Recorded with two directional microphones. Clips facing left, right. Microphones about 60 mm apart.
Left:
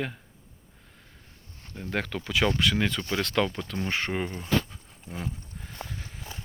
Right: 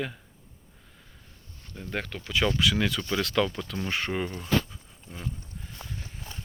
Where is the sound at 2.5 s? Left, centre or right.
Left.